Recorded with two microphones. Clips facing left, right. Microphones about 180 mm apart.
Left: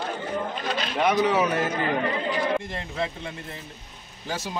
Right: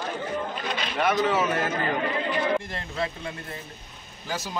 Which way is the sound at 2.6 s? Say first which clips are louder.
Left 1 dB; 20° left (ahead or behind).